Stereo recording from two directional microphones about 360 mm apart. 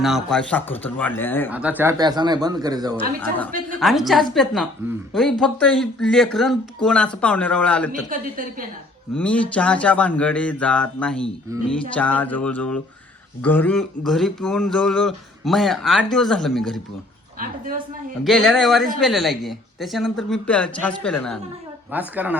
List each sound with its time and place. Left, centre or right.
0.0 s speech: centre
3.0 s speech: centre
8.1 s a woman's voice: right
9.1 s speech: centre
17.4 s a woman's voice: right
18.2 s speech: centre